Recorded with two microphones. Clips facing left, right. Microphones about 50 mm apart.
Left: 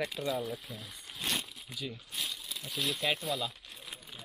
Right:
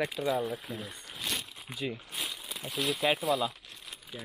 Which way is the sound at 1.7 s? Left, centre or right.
Right.